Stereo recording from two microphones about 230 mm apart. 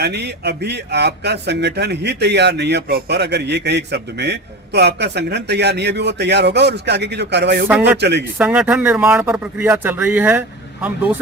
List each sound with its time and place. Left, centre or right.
0.0 s speech: right
8.4 s speech: centre